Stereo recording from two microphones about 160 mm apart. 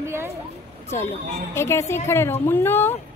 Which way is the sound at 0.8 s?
15° left (ahead or behind).